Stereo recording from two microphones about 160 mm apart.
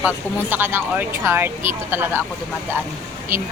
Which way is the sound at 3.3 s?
15° right (ahead or behind).